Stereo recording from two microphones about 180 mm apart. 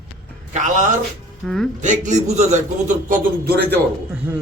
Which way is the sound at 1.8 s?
40° right (ahead or behind).